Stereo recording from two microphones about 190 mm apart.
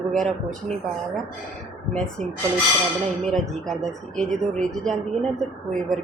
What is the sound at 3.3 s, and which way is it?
A woman's voice, centre (ahead or behind).